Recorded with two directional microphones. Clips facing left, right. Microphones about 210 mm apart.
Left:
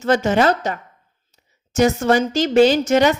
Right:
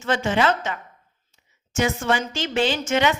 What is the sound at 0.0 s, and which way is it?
A woman's voice, 40° left (ahead or behind).